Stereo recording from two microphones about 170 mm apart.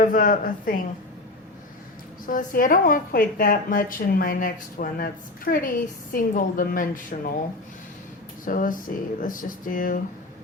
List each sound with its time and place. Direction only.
0.0 s speech: 55° left (ahead or behind)
2.2 s a woman's voice: 55° left (ahead or behind)
8.4 s speech: 55° left (ahead or behind)